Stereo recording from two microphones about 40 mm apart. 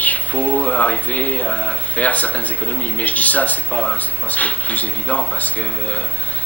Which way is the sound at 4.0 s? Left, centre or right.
Left.